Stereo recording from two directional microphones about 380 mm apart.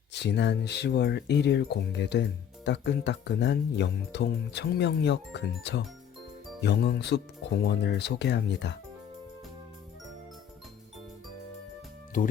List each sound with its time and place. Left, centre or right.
0.1 s speech: left
12.1 s speech: left